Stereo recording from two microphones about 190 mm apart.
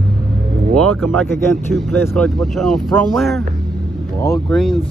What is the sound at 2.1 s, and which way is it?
Speech, centre (ahead or behind).